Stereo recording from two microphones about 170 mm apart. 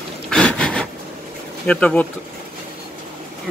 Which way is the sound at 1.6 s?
5° left (ahead or behind).